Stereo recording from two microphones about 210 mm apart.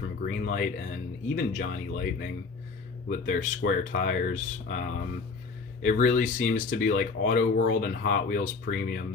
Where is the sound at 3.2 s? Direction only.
35° left (ahead or behind).